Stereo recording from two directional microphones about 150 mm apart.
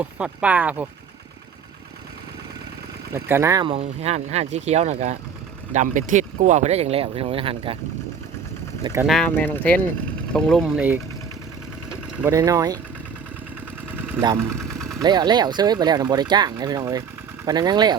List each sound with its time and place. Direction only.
0.0 s speech: 10° right (ahead or behind)
3.1 s speech: 15° right (ahead or behind)
3.7 s speech: 45° right (ahead or behind)
8.8 s speech: 20° right (ahead or behind)
9.0 s speech: centre (ahead or behind)
10.7 s speech: 10° right (ahead or behind)
12.1 s speech: 15° right (ahead or behind)
14.2 s speech: 25° right (ahead or behind)
14.5 s engine: centre (ahead or behind)
15.0 s speech: 30° right (ahead or behind)